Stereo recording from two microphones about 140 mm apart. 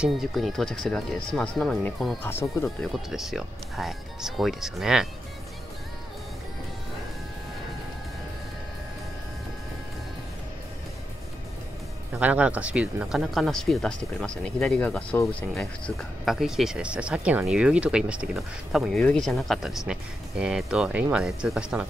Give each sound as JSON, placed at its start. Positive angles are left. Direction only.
{"t": 0.0, "sound": "speech", "side_deg": 0}
{"t": 2.2, "sound": "speech", "side_deg": 15}
{"t": 2.8, "sound": "speech", "side_deg": 0}
{"t": 12.2, "sound": "speech", "side_deg": -10}